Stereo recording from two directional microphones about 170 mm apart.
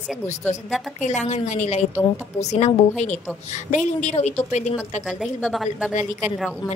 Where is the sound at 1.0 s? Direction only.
45° left (ahead or behind).